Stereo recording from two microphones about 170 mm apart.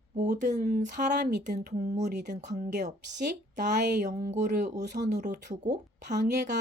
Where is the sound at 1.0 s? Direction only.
80° right.